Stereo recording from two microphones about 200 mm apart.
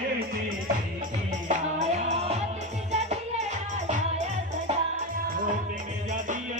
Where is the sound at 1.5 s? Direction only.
35° right (ahead or behind).